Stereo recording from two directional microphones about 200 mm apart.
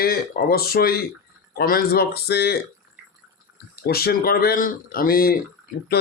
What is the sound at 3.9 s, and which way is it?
Speech, 50° left (ahead or behind).